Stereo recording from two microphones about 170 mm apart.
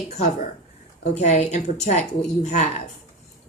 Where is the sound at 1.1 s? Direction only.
40° left (ahead or behind).